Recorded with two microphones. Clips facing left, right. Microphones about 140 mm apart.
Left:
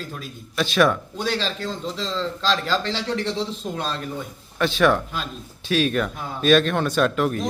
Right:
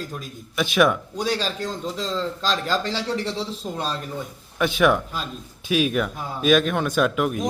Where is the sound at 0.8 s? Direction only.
10° right (ahead or behind).